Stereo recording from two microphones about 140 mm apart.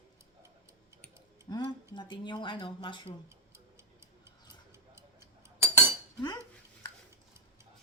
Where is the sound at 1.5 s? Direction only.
30° left (ahead or behind).